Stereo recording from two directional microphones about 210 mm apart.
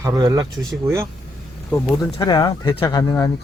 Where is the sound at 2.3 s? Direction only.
20° left (ahead or behind).